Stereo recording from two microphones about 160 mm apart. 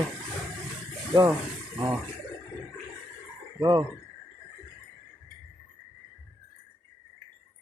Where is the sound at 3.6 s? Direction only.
20° right (ahead or behind).